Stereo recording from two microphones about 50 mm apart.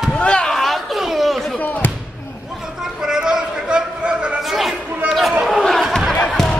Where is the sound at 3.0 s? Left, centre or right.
Centre.